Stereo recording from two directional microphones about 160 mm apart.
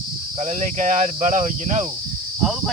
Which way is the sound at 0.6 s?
50° right (ahead or behind).